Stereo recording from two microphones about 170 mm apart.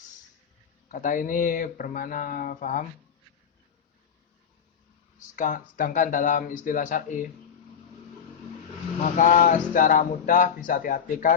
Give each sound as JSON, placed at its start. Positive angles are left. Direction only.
{"t": 0.9, "sound": "speech", "side_deg": 50}
{"t": 5.4, "sound": "speech", "side_deg": 50}
{"t": 9.0, "sound": "speech", "side_deg": 45}